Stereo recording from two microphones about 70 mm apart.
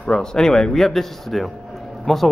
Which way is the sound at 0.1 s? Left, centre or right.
Centre.